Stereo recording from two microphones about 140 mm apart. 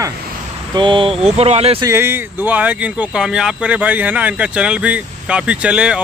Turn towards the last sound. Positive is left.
turn(degrees=-5)  # may be behind; listen again after turning